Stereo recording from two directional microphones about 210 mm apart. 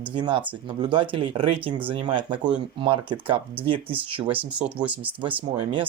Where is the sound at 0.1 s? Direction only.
20° right (ahead or behind).